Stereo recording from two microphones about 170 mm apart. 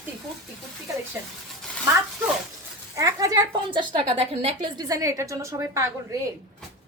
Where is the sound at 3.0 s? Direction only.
20° right (ahead or behind).